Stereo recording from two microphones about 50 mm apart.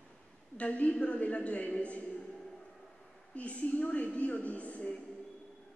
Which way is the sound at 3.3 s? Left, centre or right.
Left.